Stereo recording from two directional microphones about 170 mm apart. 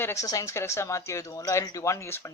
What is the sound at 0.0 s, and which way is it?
Speech, 15° left (ahead or behind).